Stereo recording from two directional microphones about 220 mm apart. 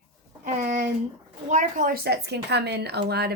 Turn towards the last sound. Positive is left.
turn(degrees=-45)  # may be behind; listen again after turning